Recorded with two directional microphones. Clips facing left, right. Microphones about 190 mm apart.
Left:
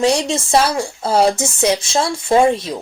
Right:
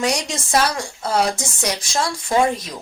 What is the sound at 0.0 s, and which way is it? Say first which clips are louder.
Speech: left 6 dB; 25° left (ahead or behind).